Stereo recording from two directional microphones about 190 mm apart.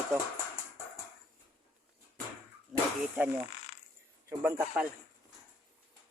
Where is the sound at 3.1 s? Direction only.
5° right (ahead or behind).